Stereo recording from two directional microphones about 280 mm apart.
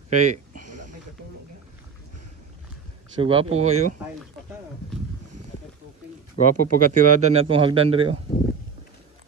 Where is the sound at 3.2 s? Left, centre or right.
Right.